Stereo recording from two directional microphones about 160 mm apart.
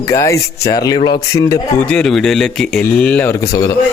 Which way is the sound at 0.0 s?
20° left (ahead or behind).